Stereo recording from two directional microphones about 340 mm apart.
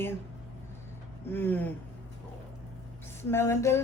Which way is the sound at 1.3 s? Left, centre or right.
Centre.